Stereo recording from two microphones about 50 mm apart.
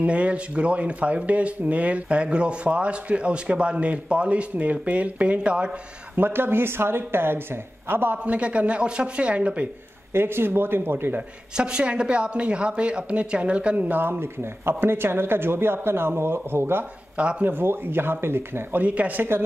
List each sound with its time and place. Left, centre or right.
0.0 s speech: right
6.1 s speech: right
8.2 s speech: right
10.1 s speech: right
11.5 s speech: centre; by 14.0 s right
14.2 s speech: right
17.2 s speech: right
17.5 s speech: right
18.8 s speech: right